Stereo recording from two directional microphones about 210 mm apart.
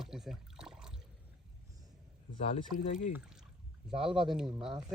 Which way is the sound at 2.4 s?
30° left (ahead or behind).